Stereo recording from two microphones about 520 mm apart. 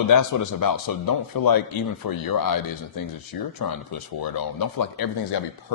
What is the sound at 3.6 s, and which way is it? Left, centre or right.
A man's voice, left.